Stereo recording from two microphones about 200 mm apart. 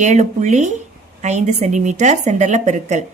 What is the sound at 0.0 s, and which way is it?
A woman's voice, 35° right (ahead or behind).